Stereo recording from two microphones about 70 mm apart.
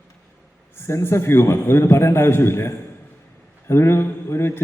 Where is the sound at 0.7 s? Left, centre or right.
Left.